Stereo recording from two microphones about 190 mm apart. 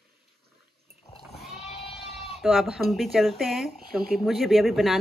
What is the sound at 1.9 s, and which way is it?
Bleat, centre (ahead or behind).